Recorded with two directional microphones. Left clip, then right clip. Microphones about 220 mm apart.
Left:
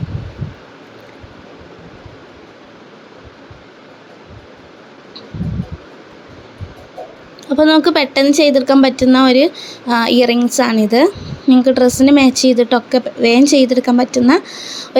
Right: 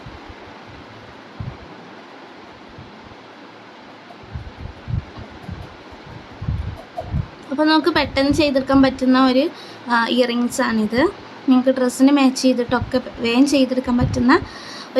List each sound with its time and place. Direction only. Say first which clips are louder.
7.5 s a woman's voice: left 6 dB; 25° left (ahead or behind)